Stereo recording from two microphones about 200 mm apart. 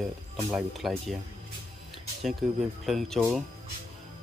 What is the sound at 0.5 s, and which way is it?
Speech, centre (ahead or behind).